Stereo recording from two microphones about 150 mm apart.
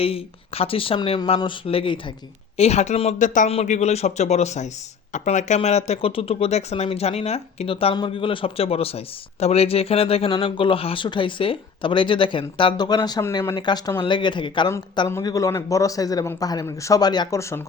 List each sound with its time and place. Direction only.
0.0 s a man's voice: 40° left (ahead or behind)
2.6 s speech: 45° left (ahead or behind)
3.5 s a man's voice: 45° left (ahead or behind); by 13.2 s 25° left (ahead or behind)
13.3 s speech: 15° left (ahead or behind)
13.6 s a man's voice: 30° left (ahead or behind)